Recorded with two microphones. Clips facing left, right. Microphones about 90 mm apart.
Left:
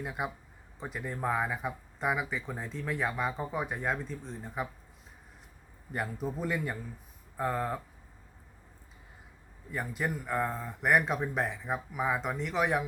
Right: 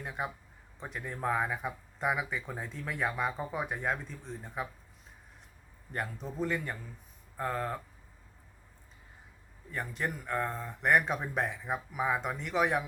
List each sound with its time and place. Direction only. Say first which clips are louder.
0.0 s speech: left 2 dB; 5° left (ahead or behind)
5.9 s a man's voice: left 3 dB; 5° left (ahead or behind)
9.7 s speech: left 2 dB; 5° left (ahead or behind)